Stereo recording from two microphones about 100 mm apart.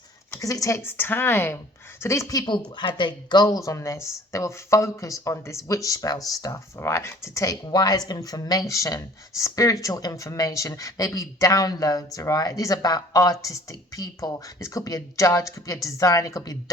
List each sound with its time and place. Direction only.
0.3 s a woman's voice: 35° left (ahead or behind)
0.8 s a woman's voice: 25° left (ahead or behind)
2.7 s speech: 50° left (ahead or behind)
3.6 s a woman's voice: 30° left (ahead or behind)